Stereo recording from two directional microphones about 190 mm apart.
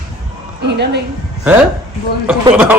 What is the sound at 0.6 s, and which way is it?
Speech, 60° right (ahead or behind).